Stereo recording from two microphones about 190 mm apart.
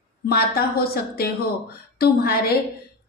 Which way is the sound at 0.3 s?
55° left (ahead or behind).